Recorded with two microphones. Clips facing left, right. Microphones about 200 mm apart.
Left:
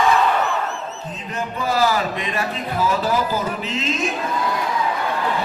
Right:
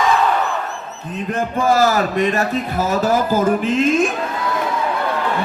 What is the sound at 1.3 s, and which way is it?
A man's voice, 50° right (ahead or behind).